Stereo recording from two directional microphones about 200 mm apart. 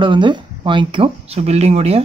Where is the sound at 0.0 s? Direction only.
25° right (ahead or behind).